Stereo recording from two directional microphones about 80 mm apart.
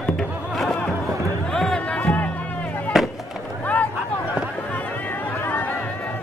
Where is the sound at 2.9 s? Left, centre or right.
Centre.